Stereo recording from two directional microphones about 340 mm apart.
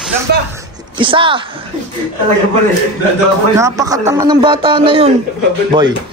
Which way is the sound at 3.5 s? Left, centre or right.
Centre.